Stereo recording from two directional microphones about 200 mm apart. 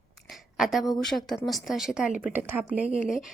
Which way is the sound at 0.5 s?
Centre (ahead or behind).